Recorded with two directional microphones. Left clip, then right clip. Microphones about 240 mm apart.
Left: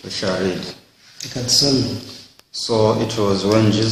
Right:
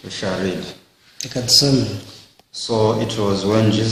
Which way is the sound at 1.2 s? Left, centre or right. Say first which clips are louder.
Right 2 dB; right.